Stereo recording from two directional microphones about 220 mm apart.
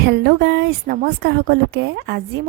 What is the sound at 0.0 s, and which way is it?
A woman's voice, 50° right (ahead or behind).